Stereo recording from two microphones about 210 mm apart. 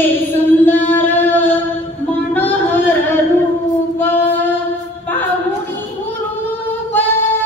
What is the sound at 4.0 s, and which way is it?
Female singing, 10° left (ahead or behind).